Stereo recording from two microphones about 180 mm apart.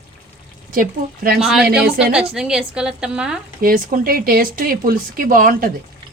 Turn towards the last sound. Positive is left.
turn(degrees=-50)  # may be behind; listen again after turning